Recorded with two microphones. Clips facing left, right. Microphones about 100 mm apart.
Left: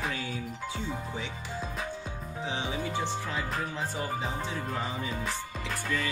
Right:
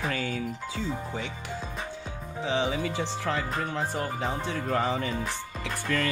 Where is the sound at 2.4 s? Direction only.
90° right.